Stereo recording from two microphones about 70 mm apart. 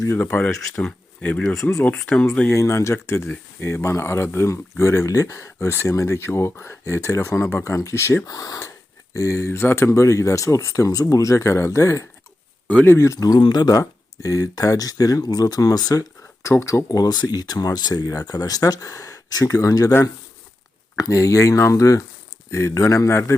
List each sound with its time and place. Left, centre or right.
0.1 s speech: left
0.8 s speech: centre
2.5 s speech: left
8.3 s speech: left
13.1 s speech: left
16.4 s speech: left
16.9 s speech: left
20.9 s speech: left